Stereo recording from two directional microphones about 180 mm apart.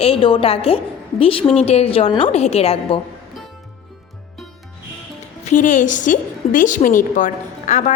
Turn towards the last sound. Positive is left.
turn(degrees=45)  # may be behind; listen again after turning